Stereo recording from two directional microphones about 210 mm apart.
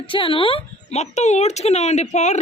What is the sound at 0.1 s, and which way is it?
A woman's voice, 25° left (ahead or behind).